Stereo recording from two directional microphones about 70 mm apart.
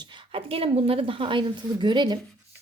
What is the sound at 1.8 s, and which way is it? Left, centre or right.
Speech, right.